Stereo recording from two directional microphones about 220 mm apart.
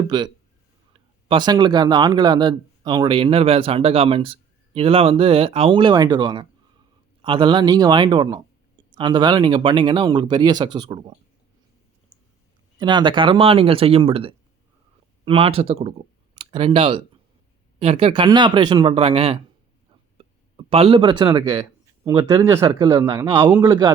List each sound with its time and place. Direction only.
0.1 s speech: 20° right (ahead or behind)
12.8 s speech: 20° right (ahead or behind)